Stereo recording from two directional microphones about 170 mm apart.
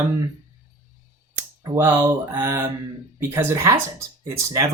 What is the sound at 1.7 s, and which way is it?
Speech, 10° right (ahead or behind).